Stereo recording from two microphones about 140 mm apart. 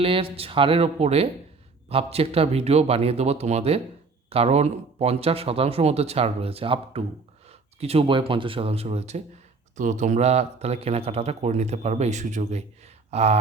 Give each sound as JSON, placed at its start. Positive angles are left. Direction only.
{"t": 0.0, "sound": "speech", "side_deg": -40}
{"t": 9.7, "sound": "speech", "side_deg": -60}